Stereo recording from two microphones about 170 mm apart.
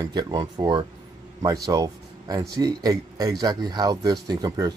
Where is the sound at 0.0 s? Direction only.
20° right (ahead or behind).